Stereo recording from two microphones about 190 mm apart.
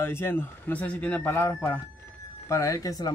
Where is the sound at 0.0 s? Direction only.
10° left (ahead or behind).